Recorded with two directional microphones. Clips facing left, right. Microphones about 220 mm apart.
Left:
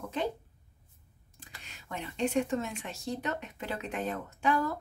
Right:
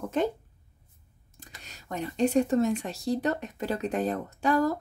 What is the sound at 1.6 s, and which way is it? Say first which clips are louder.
Speech: right 6 dB; 40° right (ahead or behind).